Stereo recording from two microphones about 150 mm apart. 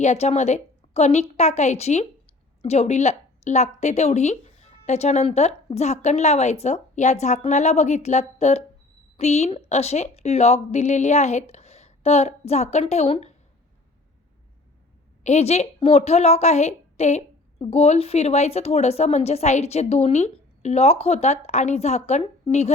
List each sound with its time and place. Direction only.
0.0 s a woman's voice: 45° left (ahead or behind)
15.2 s speech: 45° left (ahead or behind)